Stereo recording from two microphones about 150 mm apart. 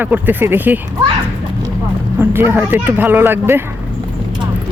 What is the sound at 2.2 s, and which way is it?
Speech, 15° right (ahead or behind).